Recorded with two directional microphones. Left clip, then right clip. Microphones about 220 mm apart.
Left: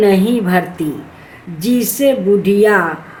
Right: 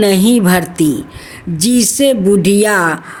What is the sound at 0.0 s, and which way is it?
A woman's voice, 50° right (ahead or behind).